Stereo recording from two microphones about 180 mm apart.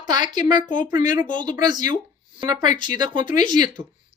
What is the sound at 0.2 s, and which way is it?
Speech, 45° left (ahead or behind).